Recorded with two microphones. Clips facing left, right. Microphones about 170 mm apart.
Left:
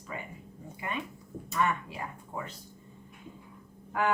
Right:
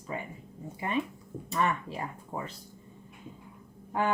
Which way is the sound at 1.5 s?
30° right (ahead or behind).